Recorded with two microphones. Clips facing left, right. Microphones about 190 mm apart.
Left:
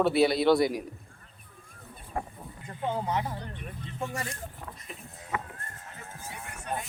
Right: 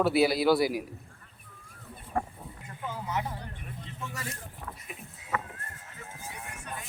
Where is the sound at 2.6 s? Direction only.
30° left (ahead or behind).